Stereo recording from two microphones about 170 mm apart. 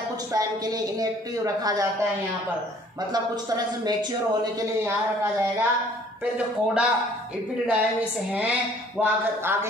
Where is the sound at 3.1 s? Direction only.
25° right (ahead or behind).